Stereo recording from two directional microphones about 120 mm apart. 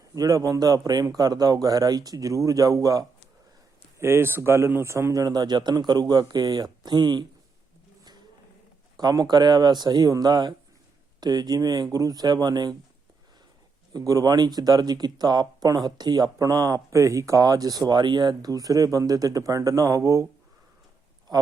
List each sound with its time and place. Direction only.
0.1 s speech: 30° right (ahead or behind)
3.9 s speech: 20° right (ahead or behind); by 7.3 s 40° right (ahead or behind)
9.0 s speech: 35° right (ahead or behind)
13.9 s speech: 30° right (ahead or behind)